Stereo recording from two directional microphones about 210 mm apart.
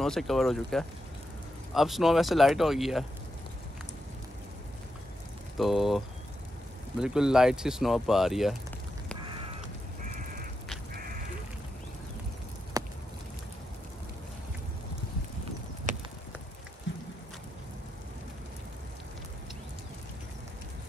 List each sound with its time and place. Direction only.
0.0 s speech: centre (ahead or behind)
5.6 s speech: centre (ahead or behind)
9.2 s crow: 25° right (ahead or behind)
10.0 s crow: 40° right (ahead or behind)
12.7 s a sound: 15° right (ahead or behind)
15.9 s a sound: 35° right (ahead or behind)